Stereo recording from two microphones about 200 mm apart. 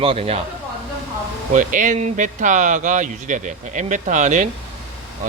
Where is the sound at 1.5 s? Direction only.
40° right (ahead or behind).